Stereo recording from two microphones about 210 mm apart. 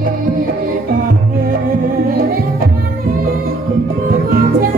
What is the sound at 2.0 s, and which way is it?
Music, 45° right (ahead or behind).